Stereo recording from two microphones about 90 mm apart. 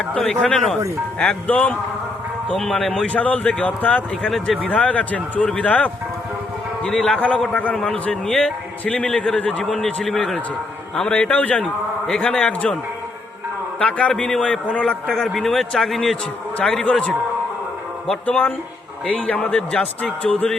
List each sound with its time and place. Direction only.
0.1 s a man's voice: 10° left (ahead or behind)
2.5 s a man's voice: 5° left (ahead or behind)
4.3 s speech: centre (ahead or behind)
4.6 s a man's voice: 15° left (ahead or behind)
13.7 s a man's voice: 10° left (ahead or behind)
16.6 s a man's voice: 10° left (ahead or behind)
18.1 s a man's voice: 15° left (ahead or behind)